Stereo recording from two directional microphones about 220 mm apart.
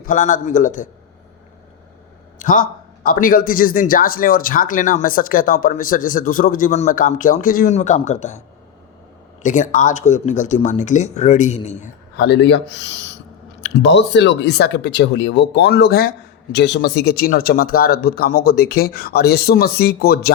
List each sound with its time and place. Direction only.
0.0 s a man's voice: 35° left (ahead or behind)
2.4 s a man's voice: 35° left (ahead or behind)
9.4 s a man's voice: 35° left (ahead or behind)
12.1 s speech: 50° left (ahead or behind)